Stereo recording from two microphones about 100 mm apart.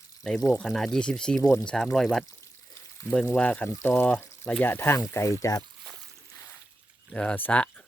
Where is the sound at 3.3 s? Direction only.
15° left (ahead or behind); by 5.6 s 35° left (ahead or behind).